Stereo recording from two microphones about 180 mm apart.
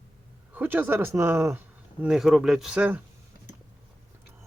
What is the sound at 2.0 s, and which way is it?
Speech, centre (ahead or behind).